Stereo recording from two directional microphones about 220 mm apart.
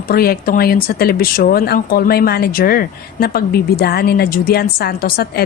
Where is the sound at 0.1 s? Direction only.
45° left (ahead or behind).